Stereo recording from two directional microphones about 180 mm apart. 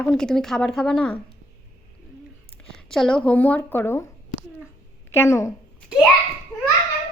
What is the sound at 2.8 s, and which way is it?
A woman's voice, 5° left (ahead or behind).